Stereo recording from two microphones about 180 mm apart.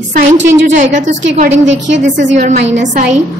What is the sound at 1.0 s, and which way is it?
A woman's voice, 45° right (ahead or behind).